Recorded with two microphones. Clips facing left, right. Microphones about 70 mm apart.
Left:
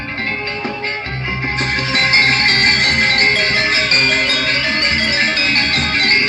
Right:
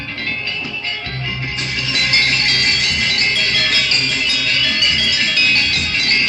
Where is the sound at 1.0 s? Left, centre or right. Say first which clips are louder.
Left 4 dB; left.